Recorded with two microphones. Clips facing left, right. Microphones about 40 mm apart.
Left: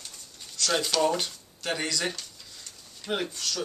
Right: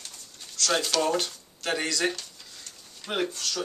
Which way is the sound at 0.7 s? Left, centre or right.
Centre.